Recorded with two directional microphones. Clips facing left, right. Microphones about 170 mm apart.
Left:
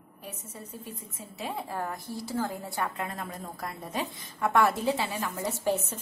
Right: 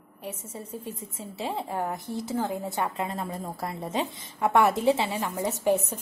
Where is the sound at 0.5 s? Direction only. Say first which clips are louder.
Right 5 dB; 30° right (ahead or behind).